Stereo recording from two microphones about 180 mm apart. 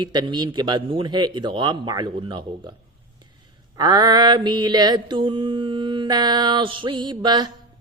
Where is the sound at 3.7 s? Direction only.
25° right (ahead or behind).